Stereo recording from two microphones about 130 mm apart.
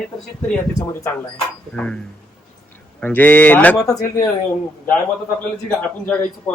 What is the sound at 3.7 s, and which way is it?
Speech, 25° left (ahead or behind).